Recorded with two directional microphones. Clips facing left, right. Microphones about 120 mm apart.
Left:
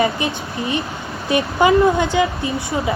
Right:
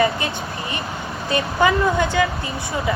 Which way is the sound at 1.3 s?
20° left (ahead or behind).